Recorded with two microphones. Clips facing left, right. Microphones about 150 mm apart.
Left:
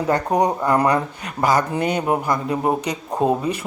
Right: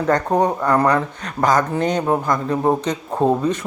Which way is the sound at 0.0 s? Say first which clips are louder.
Right 1 dB; 10° left (ahead or behind).